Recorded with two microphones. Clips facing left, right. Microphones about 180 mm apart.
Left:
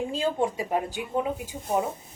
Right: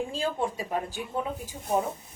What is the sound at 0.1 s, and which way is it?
A woman's voice, 20° left (ahead or behind).